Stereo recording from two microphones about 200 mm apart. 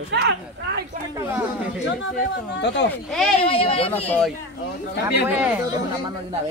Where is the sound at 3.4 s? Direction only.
30° left (ahead or behind).